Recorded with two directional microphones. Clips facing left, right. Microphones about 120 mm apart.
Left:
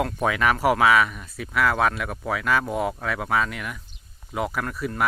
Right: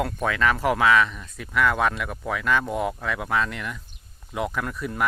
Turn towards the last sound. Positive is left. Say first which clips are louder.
# left 1 dB
turn(degrees=0)  # may be behind; listen again after turning